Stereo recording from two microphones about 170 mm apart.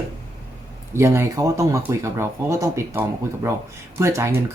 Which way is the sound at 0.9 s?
15° right (ahead or behind).